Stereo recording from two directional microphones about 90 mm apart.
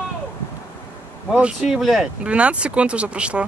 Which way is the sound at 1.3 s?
10° right (ahead or behind).